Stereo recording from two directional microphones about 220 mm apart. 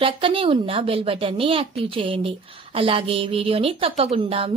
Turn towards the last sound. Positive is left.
turn(degrees=-25)  # may be behind; listen again after turning